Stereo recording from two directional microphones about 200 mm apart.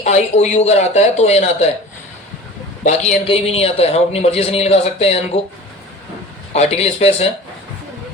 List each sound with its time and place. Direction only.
0.0 s a man's voice: 35° left (ahead or behind)
2.8 s a man's voice: 35° left (ahead or behind)
6.5 s a man's voice: 30° left (ahead or behind)